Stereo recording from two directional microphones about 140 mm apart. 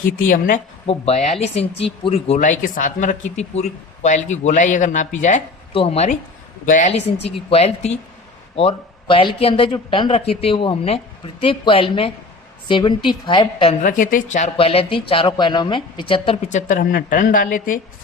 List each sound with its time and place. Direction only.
0.3 s speech: 75° left (ahead or behind)
0.9 s speech: 50° left (ahead or behind)
2.4 s speech: 65° left (ahead or behind)
5.7 s speech: 40° left (ahead or behind)
6.7 s speech: 65° left (ahead or behind)
6.9 s speech: 45° left (ahead or behind)
13.8 s speech: 70° left (ahead or behind)
14.5 s speech: 40° left (ahead or behind)
16.5 s speech: 60° left (ahead or behind); by 17.7 s 75° left (ahead or behind)